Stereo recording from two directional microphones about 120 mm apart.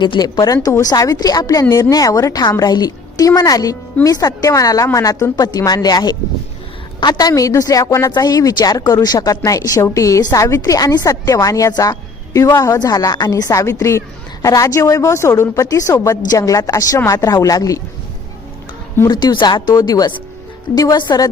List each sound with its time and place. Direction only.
0.0 s a woman's voice: 40° left (ahead or behind)
19.0 s a woman's voice: 35° left (ahead or behind)